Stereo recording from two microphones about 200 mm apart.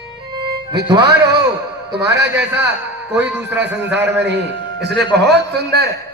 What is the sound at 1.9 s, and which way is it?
Speech, 60° right (ahead or behind).